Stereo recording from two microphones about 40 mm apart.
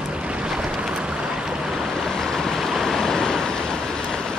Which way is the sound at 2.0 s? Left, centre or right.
Centre.